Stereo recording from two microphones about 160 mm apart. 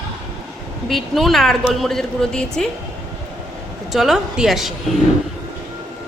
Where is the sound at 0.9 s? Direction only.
Centre (ahead or behind).